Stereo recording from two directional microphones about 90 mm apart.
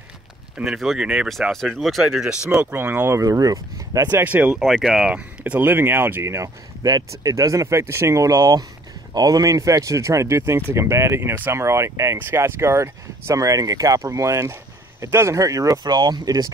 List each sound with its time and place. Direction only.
0.7 s speech: 5° right (ahead or behind)
2.6 s speech: 20° right (ahead or behind)
3.2 s speech: 40° right (ahead or behind)
4.1 s speech: 20° right (ahead or behind)
4.6 s speech: centre (ahead or behind)
5.4 s speech: 20° right (ahead or behind)
6.3 s speech: 40° right (ahead or behind)